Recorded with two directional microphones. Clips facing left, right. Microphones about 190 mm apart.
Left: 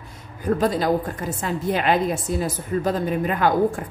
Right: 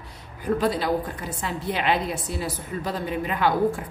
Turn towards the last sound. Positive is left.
turn(degrees=45)  # may be behind; listen again after turning